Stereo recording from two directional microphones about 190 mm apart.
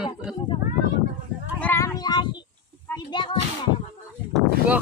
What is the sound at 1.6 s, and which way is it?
Child singing, 15° left (ahead or behind).